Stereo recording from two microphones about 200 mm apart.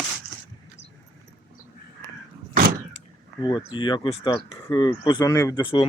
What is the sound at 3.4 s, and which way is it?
Speech, 20° left (ahead or behind).